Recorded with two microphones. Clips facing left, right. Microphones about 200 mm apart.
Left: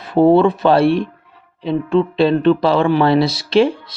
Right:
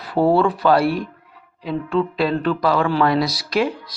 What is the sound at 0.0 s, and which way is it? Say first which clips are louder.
Speech: left 5 dB; 20° left (ahead or behind).